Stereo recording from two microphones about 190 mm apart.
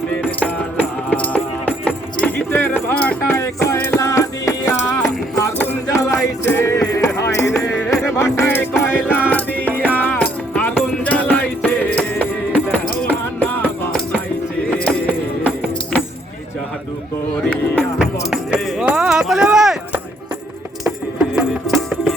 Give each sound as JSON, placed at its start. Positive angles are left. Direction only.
{"t": 0.2, "sound": "music", "side_deg": 10}
{"t": 18.0, "sound": "a sound", "side_deg": -5}
{"t": 21.3, "sound": "music", "side_deg": 0}